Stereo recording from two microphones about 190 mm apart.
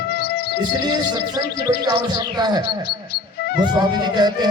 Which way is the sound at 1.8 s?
20° right (ahead or behind).